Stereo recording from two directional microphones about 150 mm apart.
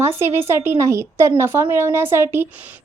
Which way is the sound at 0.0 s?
15° right (ahead or behind).